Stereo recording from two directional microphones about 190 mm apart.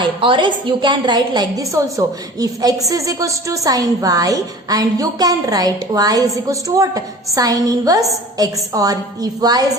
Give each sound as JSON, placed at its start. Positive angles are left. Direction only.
{"t": 0.0, "sound": "a woman's voice", "side_deg": -25}